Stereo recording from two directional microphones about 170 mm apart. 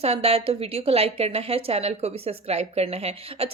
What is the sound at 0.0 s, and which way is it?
A woman's voice, 35° right (ahead or behind).